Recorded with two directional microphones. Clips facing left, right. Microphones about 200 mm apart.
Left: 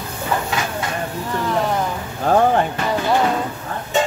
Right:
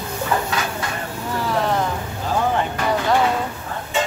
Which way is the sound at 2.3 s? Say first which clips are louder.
Left 7 dB; 55° left (ahead or behind).